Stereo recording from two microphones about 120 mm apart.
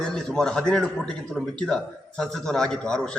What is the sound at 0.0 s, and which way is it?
A man's voice, 5° left (ahead or behind).